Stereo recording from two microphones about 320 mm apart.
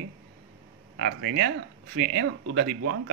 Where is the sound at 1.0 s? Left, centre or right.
Right.